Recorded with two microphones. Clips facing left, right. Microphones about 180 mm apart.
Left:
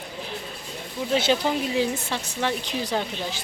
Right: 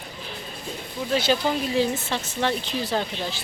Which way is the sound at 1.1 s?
20° left (ahead or behind).